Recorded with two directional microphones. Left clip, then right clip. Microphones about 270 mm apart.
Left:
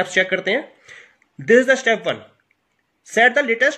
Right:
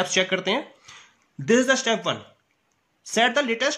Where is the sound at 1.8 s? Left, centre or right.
Right.